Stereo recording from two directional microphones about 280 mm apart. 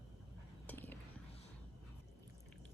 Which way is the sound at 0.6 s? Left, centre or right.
Centre.